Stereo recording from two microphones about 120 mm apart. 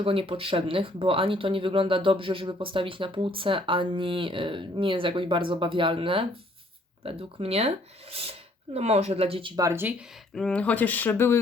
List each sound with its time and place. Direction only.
0.0 s speech: 50° right (ahead or behind)
9.6 s speech: 25° right (ahead or behind)
10.3 s speech: 10° left (ahead or behind)